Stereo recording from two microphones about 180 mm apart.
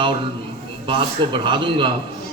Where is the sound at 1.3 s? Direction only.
25° right (ahead or behind).